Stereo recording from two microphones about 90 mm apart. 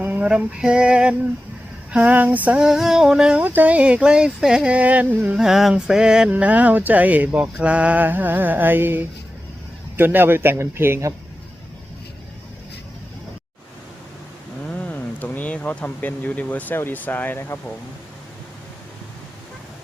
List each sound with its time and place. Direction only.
0.0 s a sound: 15° right (ahead or behind)
1.9 s speech: 15° right (ahead or behind)
3.4 s speech: 20° right (ahead or behind)
5.4 s music: 5° right (ahead or behind)
6.3 s speech: 15° right (ahead or behind)
7.6 s a sound: 15° right (ahead or behind)
14.7 s speech: 15° left (ahead or behind)